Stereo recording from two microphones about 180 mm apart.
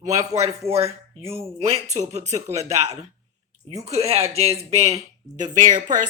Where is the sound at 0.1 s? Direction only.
20° right (ahead or behind).